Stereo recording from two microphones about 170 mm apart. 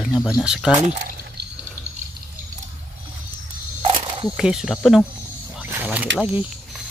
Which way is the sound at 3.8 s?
35° right (ahead or behind).